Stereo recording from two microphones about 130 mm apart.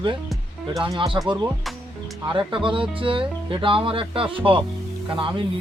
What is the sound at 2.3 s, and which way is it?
Speech, 40° right (ahead or behind).